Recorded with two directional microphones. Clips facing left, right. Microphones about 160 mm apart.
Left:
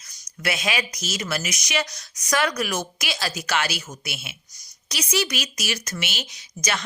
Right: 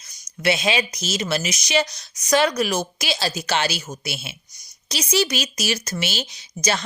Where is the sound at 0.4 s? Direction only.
25° right (ahead or behind).